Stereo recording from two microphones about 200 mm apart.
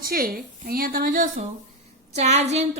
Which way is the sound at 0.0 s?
45° right (ahead or behind).